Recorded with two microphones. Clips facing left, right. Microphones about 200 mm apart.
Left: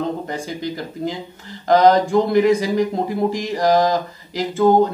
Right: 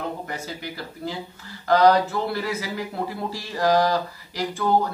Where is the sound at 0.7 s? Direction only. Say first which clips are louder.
Left 6 dB; 15° left (ahead or behind).